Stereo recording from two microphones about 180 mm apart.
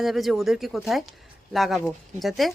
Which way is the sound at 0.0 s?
Centre (ahead or behind).